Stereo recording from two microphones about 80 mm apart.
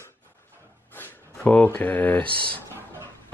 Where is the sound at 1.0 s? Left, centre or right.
Centre.